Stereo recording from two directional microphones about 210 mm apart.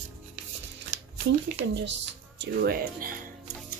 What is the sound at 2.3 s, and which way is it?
Speech, 45° right (ahead or behind).